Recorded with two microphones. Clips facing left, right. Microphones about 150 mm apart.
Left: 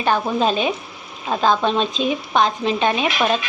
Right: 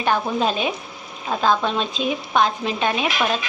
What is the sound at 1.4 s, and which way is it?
Speech, 20° left (ahead or behind).